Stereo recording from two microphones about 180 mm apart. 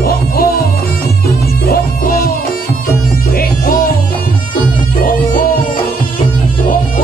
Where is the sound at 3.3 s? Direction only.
55° left (ahead or behind).